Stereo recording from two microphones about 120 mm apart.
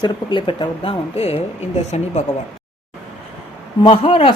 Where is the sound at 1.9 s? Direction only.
65° left (ahead or behind).